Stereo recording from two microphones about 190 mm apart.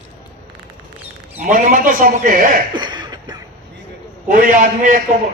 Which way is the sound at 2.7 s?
25° right (ahead or behind).